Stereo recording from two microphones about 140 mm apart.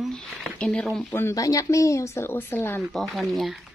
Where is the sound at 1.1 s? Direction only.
20° left (ahead or behind).